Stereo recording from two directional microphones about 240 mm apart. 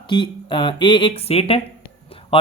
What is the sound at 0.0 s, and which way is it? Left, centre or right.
Speech, centre.